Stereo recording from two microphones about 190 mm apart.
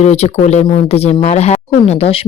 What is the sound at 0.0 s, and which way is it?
Speech, 35° left (ahead or behind).